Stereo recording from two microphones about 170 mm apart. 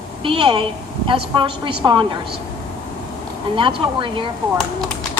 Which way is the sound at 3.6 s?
30° right (ahead or behind).